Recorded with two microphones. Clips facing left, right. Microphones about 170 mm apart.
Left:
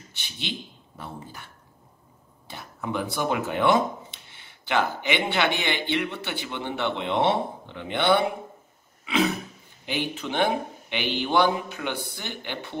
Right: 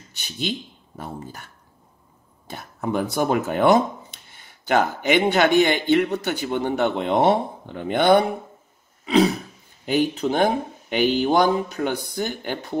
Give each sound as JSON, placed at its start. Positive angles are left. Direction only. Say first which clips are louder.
{"t": 0.1, "sound": "speech", "louder": "right 7 dB", "side_deg": -45}
{"t": 9.0, "sound": "throat clearing", "louder": "right 6 dB", "side_deg": -35}
{"t": 9.8, "sound": "speech", "louder": "right 9 dB", "side_deg": -40}